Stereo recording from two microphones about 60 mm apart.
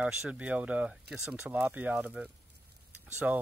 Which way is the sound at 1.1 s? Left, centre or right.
Centre.